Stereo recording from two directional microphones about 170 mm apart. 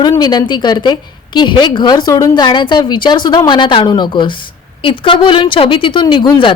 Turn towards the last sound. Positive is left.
turn(degrees=30)  # may be behind; listen again after turning